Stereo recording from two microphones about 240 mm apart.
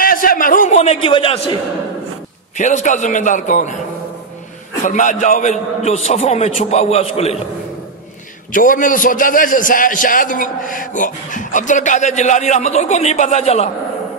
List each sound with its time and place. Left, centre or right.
0.0 s a sound: left
2.5 s a man's voice: left
4.8 s a man's voice: left
8.5 s a man's voice: left